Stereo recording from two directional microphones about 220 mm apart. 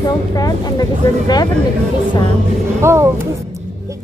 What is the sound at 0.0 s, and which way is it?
Speech, 15° left (ahead or behind).